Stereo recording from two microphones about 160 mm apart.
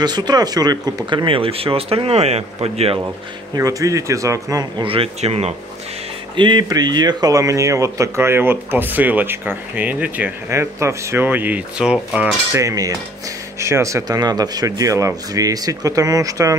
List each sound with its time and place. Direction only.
0.0 s speech: 25° right (ahead or behind)
3.5 s speech: 20° right (ahead or behind)
4.8 s speech: 35° right (ahead or behind)
6.3 s speech: 30° right (ahead or behind); by 12.4 s 5° right (ahead or behind)
12.5 s speech: 20° right (ahead or behind)